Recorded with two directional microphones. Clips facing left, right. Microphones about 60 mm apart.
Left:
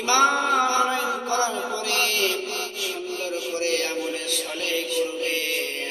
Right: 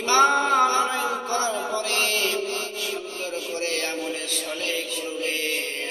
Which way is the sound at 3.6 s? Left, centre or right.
Right.